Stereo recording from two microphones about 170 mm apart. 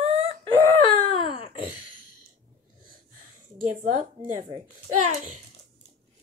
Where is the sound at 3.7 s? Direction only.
45° right (ahead or behind).